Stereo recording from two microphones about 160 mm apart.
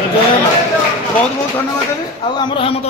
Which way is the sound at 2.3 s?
30° left (ahead or behind).